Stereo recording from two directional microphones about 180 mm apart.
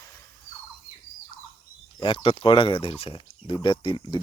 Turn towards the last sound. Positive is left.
turn(degrees=25)  # may be behind; listen again after turning